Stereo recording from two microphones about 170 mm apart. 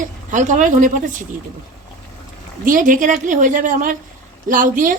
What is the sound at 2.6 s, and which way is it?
A woman's voice, 50° right (ahead or behind).